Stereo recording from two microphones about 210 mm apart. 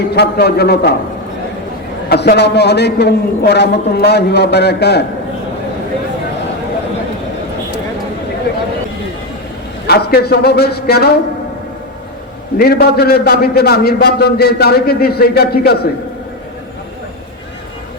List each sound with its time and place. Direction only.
0.1 s a man's voice: 50° left (ahead or behind)
2.0 s a man's voice: 50° left (ahead or behind)
9.8 s a man's voice: 50° left (ahead or behind)
12.5 s a man's voice: 45° left (ahead or behind)